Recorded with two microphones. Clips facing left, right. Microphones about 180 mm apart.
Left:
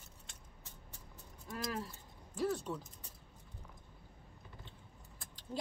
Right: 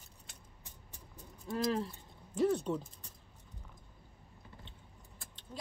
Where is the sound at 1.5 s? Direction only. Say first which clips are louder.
Right 7 dB; 30° right (ahead or behind).